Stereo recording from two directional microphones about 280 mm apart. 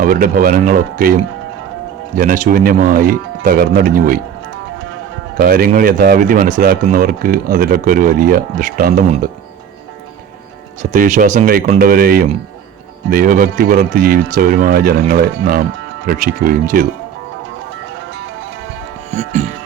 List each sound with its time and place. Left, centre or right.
0.0 s speech: right
2.1 s speech: right
5.4 s speech: right
10.9 s speech: right
19.1 s music: right